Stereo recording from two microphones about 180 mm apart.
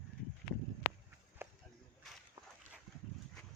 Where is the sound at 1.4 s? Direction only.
15° right (ahead or behind).